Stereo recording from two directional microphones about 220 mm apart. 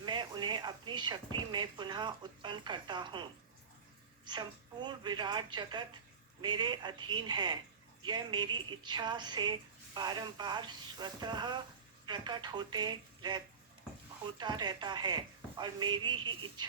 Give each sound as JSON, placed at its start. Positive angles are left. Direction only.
{"t": 0.0, "sound": "speech", "side_deg": -20}
{"t": 4.3, "sound": "speech", "side_deg": -20}